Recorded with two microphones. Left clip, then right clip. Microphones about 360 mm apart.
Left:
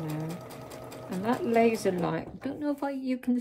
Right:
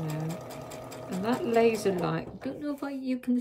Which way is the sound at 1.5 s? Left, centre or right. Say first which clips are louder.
Right 1 dB; centre.